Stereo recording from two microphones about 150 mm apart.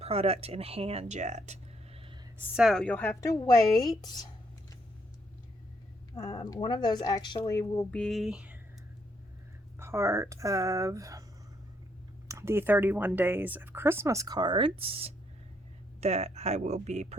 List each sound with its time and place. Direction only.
0.0 s speech: 40° right (ahead or behind)
2.6 s a woman's voice: centre (ahead or behind)
3.2 s speech: 20° left (ahead or behind)
6.2 s speech: 25° left (ahead or behind)
7.9 s a sound: 5° left (ahead or behind)
9.7 s speech: 20° right (ahead or behind)
12.3 s speech: 20° right (ahead or behind); by 17.2 s 50° right (ahead or behind)